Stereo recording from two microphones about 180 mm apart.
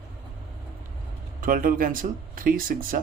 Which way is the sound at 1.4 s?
50° right (ahead or behind).